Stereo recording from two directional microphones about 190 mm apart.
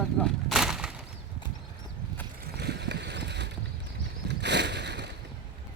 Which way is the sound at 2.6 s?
60° right (ahead or behind).